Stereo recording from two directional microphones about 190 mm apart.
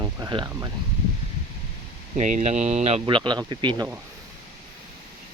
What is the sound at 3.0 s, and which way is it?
Speech, 25° right (ahead or behind).